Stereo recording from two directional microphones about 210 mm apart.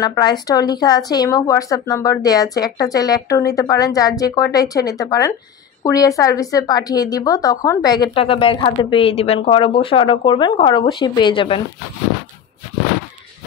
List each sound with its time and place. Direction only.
0.0 s a woman's voice: 20° left (ahead or behind)